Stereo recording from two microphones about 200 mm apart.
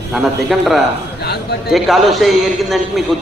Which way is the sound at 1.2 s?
55° left (ahead or behind).